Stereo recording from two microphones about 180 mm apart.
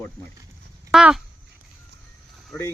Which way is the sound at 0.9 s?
5° right (ahead or behind).